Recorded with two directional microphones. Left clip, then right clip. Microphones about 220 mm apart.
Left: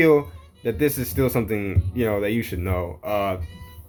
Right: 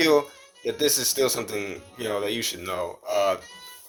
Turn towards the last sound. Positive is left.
turn(degrees=-25)  # may be behind; listen again after turning